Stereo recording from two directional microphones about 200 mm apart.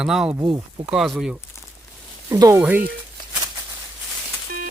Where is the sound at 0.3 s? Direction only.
20° right (ahead or behind).